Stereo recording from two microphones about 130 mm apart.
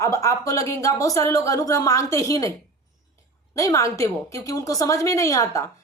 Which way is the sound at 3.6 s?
25° left (ahead or behind).